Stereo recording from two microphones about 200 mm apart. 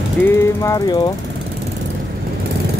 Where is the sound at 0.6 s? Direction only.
20° left (ahead or behind).